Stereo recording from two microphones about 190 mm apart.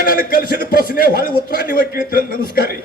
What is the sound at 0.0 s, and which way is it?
A man's voice, 50° left (ahead or behind).